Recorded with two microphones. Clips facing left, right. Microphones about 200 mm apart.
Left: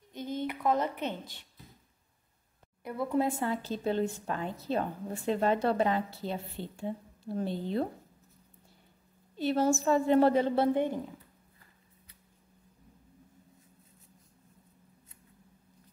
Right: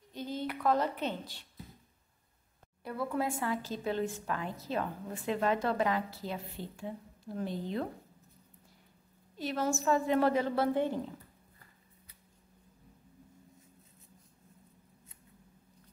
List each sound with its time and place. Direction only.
0.1 s a sound: 20° left (ahead or behind)
2.8 s a woman's voice: 20° left (ahead or behind)
9.4 s a woman's voice: 30° left (ahead or behind)